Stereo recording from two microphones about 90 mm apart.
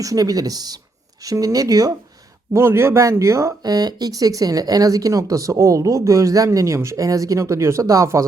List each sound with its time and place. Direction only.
0.0 s speech: 40° right (ahead or behind)
2.5 s speech: 30° right (ahead or behind)
3.6 s speech: 50° right (ahead or behind)